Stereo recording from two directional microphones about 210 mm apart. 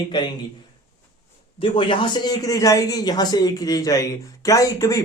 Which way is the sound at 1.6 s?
25° left (ahead or behind).